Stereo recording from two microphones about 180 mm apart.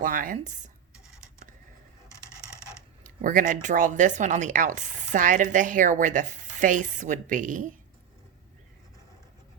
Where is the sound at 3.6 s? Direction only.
45° right (ahead or behind).